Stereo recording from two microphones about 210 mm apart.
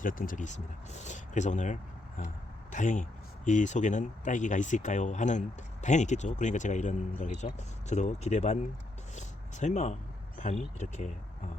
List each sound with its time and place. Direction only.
0.0 s speech: 40° left (ahead or behind)
9.1 s a sound: 35° left (ahead or behind)
10.3 s speech: 35° left (ahead or behind)